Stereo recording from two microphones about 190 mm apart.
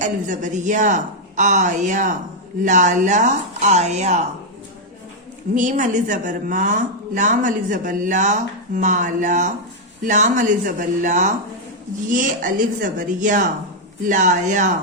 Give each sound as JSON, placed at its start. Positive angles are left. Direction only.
{"t": 0.0, "sound": "a woman's voice", "side_deg": -40}
{"t": 5.5, "sound": "a woman's voice", "side_deg": -40}